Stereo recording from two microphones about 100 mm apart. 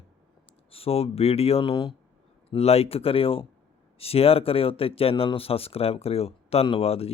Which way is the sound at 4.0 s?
80° left.